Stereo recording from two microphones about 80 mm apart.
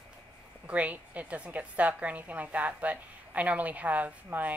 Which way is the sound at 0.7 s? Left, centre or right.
Centre.